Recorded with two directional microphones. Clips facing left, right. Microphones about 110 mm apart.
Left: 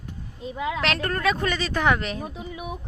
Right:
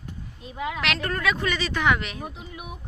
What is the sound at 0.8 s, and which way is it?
Speech, 40° left (ahead or behind).